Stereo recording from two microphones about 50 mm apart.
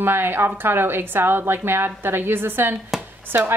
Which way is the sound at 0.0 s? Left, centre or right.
Right.